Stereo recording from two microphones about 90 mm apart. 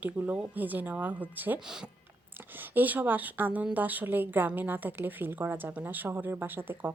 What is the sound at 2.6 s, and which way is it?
A woman's voice, 20° right (ahead or behind).